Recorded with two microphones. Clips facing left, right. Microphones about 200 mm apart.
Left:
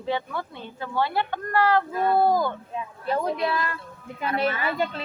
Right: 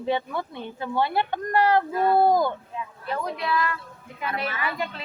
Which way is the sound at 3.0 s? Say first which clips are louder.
Left 4 dB; 30° left (ahead or behind).